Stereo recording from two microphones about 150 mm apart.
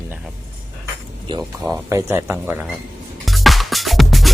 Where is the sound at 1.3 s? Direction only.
35° right (ahead or behind).